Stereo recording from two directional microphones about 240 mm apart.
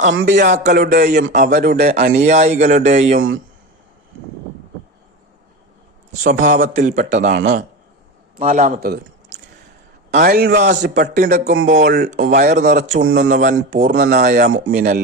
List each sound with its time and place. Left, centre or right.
0.1 s speech: right
0.3 s speech: right
6.1 s a man's voice: right
12.2 s speech: right